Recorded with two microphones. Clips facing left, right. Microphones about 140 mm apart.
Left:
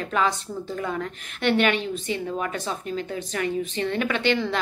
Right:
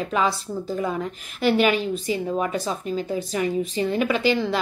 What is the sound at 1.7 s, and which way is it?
Speech, 35° right (ahead or behind).